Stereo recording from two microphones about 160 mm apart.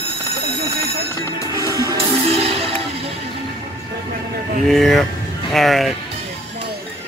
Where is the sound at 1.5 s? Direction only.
20° right (ahead or behind).